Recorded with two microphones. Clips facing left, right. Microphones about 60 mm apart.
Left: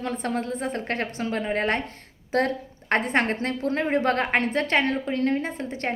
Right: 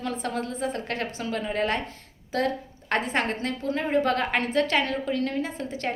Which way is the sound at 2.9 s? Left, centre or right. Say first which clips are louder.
Left 3 dB; left.